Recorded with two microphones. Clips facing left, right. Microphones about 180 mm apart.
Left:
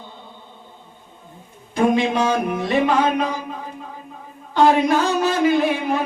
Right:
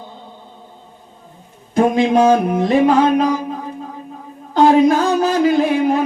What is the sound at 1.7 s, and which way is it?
Music, 45° right (ahead or behind).